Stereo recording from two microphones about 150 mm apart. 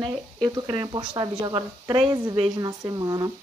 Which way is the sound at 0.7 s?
30° right (ahead or behind).